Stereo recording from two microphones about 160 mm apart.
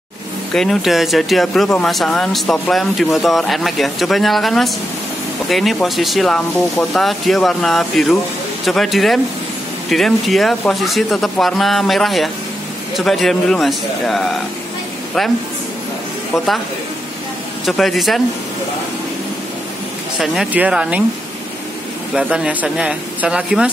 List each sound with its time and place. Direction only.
0.5 s speech: 5° left (ahead or behind)
17.6 s speech: centre (ahead or behind)
20.2 s speech: 5° right (ahead or behind)
22.1 s speech: 5° right (ahead or behind)